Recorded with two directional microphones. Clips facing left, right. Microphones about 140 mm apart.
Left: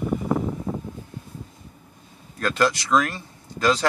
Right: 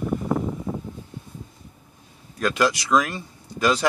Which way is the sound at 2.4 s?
10° right (ahead or behind).